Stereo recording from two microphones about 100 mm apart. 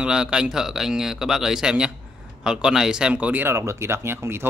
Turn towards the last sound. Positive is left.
turn(degrees=-25)  # may be behind; listen again after turning